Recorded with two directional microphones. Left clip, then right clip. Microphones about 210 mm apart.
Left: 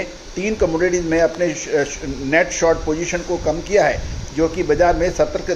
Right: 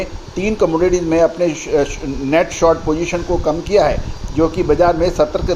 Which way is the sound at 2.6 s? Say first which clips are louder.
Right 3 dB; 45° right (ahead or behind).